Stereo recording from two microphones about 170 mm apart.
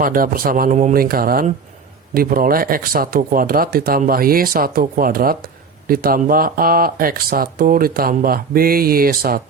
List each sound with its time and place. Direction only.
0.0 s speech: 55° right (ahead or behind)